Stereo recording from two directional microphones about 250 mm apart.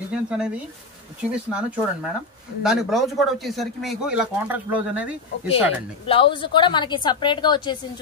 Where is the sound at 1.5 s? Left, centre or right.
Centre.